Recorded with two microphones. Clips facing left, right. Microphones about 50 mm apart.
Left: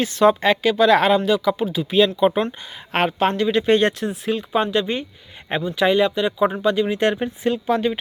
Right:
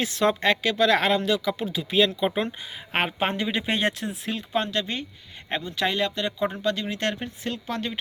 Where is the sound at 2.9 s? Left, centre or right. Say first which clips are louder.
Left 6 dB; centre.